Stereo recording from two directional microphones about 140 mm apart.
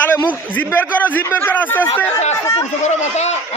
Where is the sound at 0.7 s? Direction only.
10° left (ahead or behind).